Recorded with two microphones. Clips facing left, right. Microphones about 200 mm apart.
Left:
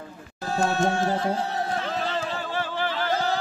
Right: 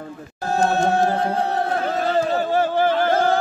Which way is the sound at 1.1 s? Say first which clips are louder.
Right 4 dB; 60° right (ahead or behind).